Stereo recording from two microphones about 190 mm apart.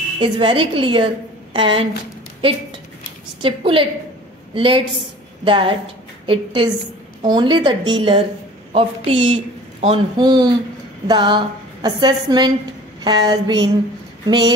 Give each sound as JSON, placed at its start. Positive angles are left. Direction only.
{"t": 0.2, "sound": "speech", "side_deg": -30}
{"t": 3.4, "sound": "speech", "side_deg": -30}